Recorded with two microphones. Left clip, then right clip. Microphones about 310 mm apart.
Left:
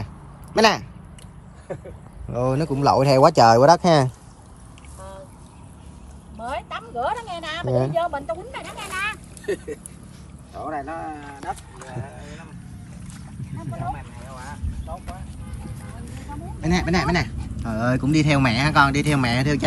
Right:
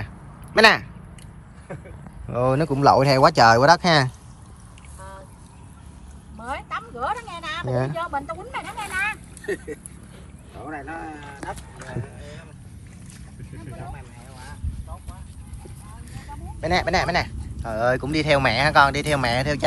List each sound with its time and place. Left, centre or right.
0.6 s speech: centre
2.2 s speech: centre
6.5 s a sound: centre
10.6 s speech: left
12.2 s a sound: centre
16.6 s speech: centre